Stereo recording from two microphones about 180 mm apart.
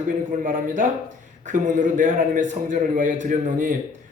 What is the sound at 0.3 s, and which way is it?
A man's voice, 50° right (ahead or behind).